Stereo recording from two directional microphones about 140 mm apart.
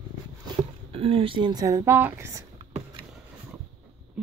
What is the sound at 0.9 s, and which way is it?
Speech, 40° right (ahead or behind).